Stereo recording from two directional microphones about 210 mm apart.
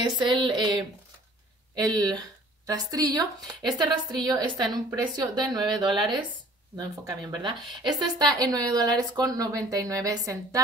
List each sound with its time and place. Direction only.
0.2 s speech: 20° right (ahead or behind)